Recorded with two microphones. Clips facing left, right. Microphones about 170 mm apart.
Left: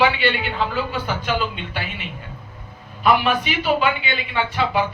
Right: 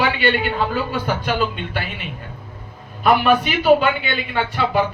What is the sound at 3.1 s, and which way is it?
A man's voice, 50° right (ahead or behind).